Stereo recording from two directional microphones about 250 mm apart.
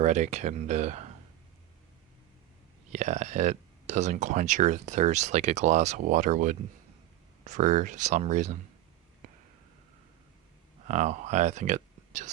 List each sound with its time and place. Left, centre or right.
0.0 s speech: right
2.9 s speech: right
10.8 s speech: right